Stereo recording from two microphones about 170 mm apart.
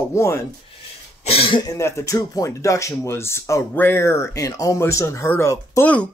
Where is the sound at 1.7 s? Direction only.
20° left (ahead or behind).